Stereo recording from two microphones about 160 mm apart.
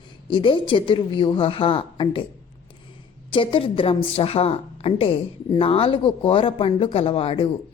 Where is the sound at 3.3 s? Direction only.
30° left (ahead or behind).